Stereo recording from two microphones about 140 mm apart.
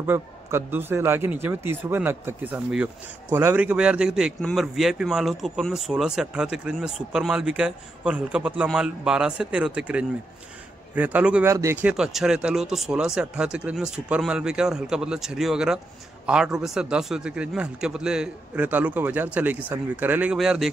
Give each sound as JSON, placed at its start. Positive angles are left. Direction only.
{"t": 0.0, "sound": "a man's voice", "side_deg": -15}
{"t": 11.8, "sound": "a man's voice", "side_deg": -5}